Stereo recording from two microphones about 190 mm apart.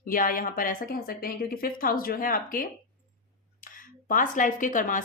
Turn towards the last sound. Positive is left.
turn(degrees=45)  # may be behind; listen again after turning